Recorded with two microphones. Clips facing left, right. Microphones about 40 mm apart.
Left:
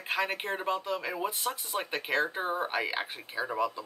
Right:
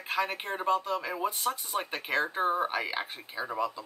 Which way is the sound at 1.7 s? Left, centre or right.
Centre.